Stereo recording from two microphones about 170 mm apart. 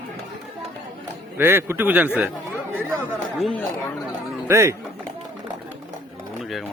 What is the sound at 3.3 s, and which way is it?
Speech, centre (ahead or behind).